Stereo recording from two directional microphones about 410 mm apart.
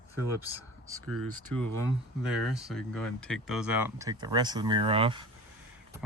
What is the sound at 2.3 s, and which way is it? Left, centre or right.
Speech, centre.